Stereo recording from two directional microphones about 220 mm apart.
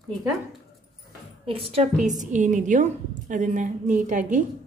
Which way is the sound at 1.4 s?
25° right (ahead or behind).